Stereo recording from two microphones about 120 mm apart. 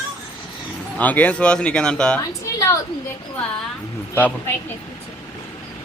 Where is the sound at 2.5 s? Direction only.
30° left (ahead or behind).